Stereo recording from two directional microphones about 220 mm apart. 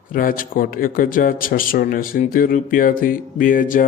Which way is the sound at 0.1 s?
40° left (ahead or behind).